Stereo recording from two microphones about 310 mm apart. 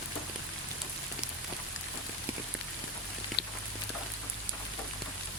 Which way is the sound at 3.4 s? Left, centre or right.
Left.